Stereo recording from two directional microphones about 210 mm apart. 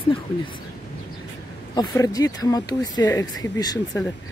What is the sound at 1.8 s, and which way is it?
Speech, 15° left (ahead or behind).